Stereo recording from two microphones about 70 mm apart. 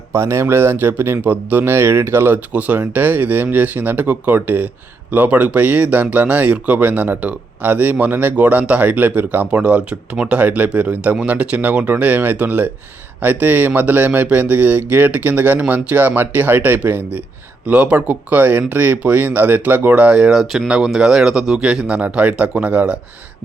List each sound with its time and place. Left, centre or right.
0.1 s speech: right; by 23.0 s centre